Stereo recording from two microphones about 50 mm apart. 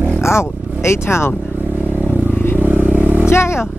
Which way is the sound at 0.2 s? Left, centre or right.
Left.